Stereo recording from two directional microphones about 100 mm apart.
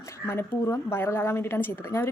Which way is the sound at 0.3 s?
25° left (ahead or behind).